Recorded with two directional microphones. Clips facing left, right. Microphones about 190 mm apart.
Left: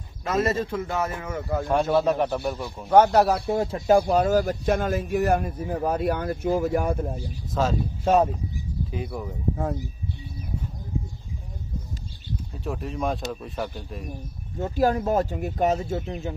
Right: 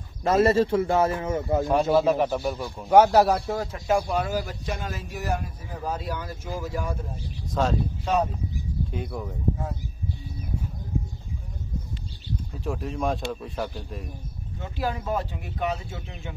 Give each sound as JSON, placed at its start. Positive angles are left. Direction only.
{"t": 0.2, "sound": "speech", "side_deg": -30}
{"t": 1.7, "sound": "speech", "side_deg": 0}
{"t": 3.4, "sound": "speech", "side_deg": 25}
{"t": 4.1, "sound": "a man's voice", "side_deg": 45}
{"t": 7.6, "sound": "speech", "side_deg": 0}
{"t": 8.0, "sound": "speech", "side_deg": 45}
{"t": 8.9, "sound": "speech", "side_deg": 0}
{"t": 12.5, "sound": "speech", "side_deg": 0}
{"t": 14.6, "sound": "speech", "side_deg": 45}